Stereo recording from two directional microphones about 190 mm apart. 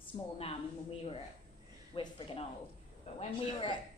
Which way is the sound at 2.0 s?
25° left (ahead or behind).